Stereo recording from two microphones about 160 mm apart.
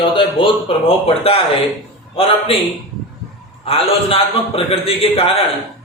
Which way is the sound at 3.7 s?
35° left (ahead or behind).